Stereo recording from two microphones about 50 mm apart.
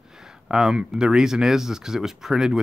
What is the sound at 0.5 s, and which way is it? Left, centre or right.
Speech, centre.